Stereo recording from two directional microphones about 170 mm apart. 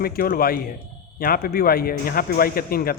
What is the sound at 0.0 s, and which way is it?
Speech, 60° left (ahead or behind).